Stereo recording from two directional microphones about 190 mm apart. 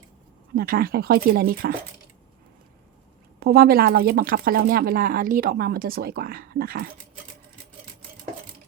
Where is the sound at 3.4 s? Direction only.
55° right (ahead or behind).